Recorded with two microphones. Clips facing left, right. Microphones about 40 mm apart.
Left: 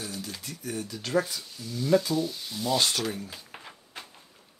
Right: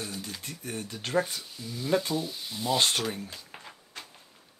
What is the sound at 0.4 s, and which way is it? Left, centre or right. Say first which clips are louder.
Speech: left 2 dB; right.